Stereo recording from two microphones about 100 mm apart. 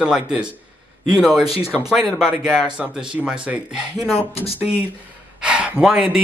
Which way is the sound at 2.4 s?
10° right (ahead or behind).